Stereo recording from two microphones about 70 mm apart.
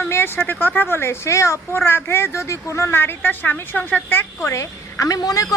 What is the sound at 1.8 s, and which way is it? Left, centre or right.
A woman's voice, left.